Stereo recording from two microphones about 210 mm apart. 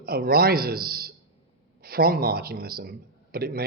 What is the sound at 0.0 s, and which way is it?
Speech, 45° right (ahead or behind).